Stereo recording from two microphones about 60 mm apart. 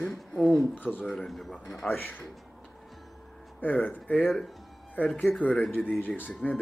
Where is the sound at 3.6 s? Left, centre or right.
Left.